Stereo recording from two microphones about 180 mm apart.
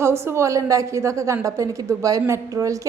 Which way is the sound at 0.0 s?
15° right (ahead or behind).